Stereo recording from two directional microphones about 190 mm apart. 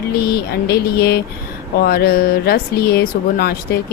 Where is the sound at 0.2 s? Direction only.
55° left (ahead or behind).